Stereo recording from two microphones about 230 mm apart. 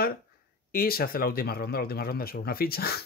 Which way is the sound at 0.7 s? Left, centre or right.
Left.